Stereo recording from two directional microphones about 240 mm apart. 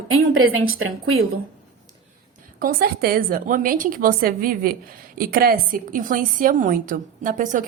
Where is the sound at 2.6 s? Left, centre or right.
Right.